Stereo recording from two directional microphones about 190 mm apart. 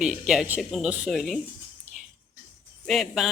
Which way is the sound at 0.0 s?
Centre (ahead or behind).